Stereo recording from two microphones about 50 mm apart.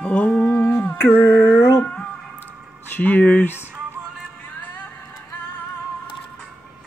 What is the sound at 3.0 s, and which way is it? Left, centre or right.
Speech, left.